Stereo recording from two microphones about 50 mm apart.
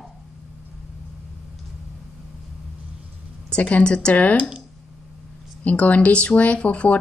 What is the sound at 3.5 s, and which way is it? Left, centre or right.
Speech, left.